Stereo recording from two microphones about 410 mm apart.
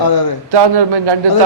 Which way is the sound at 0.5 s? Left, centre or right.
Right.